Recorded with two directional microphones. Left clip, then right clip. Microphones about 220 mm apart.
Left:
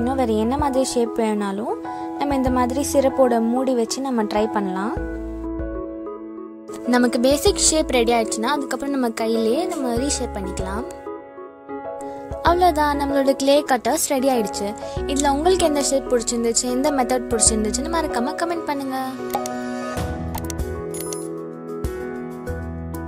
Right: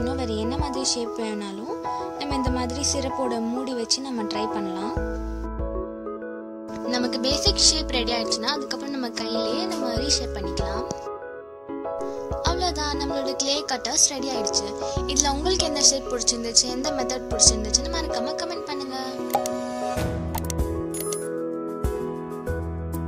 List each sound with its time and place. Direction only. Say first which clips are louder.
0.0 s speech: left 6 dB; 20° left (ahead or behind)
7.0 s speech: left 7 dB; 25° left (ahead or behind)
12.4 s speech: left 10 dB; 30° left (ahead or behind)